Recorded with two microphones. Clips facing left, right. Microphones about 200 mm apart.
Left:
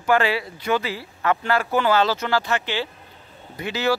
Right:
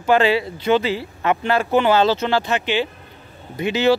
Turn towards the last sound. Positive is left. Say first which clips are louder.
# right 6 dB
turn(degrees=-20)  # may be behind; listen again after turning